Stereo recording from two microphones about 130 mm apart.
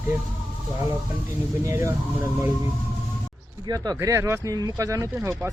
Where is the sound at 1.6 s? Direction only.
20° right (ahead or behind).